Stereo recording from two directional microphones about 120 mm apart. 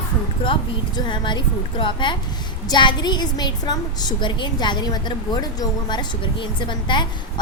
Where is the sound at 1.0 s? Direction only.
40° left (ahead or behind).